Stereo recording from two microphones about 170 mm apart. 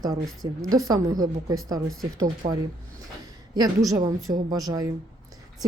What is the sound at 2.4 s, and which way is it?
Speech, 55° right (ahead or behind).